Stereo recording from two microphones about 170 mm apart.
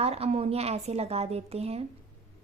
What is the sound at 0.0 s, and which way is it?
A woman's voice, 35° right (ahead or behind).